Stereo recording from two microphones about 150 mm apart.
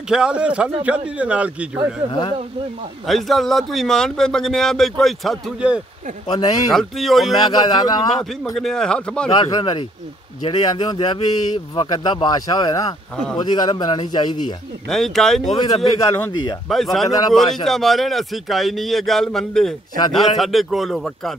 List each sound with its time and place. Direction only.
0.1 s a man's voice: 5° right (ahead or behind)
3.1 s a man's voice: centre (ahead or behind)
6.2 s speech: 30° left (ahead or behind)
6.7 s a man's voice: centre (ahead or behind)
7.3 s speech: 25° left (ahead or behind)
8.5 s a man's voice: 5° left (ahead or behind)
9.3 s speech: 30° left (ahead or behind)
13.1 s a man's voice: 5° left (ahead or behind)
13.4 s speech: 30° left (ahead or behind)
14.9 s a man's voice: centre (ahead or behind)
15.6 s speech: 25° left (ahead or behind)
16.6 s a man's voice: centre (ahead or behind)